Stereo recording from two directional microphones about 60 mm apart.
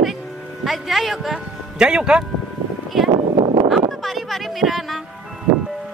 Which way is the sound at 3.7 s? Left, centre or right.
Centre.